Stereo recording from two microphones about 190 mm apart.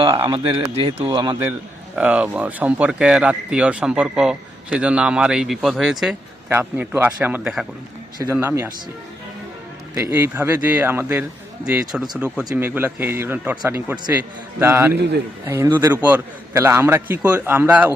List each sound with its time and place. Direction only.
0.1 s speech: 25° right (ahead or behind)
2.0 s a man's voice: 5° right (ahead or behind)
9.9 s a man's voice: 10° right (ahead or behind)